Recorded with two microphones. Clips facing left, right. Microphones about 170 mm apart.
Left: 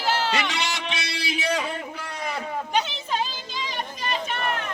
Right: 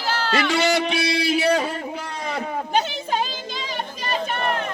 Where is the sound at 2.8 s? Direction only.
45° right (ahead or behind).